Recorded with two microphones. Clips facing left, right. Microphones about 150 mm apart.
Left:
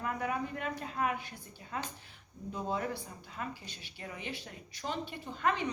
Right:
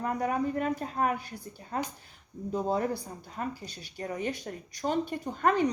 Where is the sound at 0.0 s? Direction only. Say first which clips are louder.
Right 6 dB; 40° right (ahead or behind).